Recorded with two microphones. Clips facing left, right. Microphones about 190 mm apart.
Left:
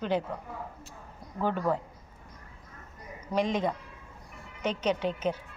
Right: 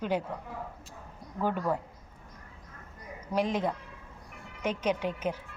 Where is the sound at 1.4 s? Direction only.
10° right (ahead or behind).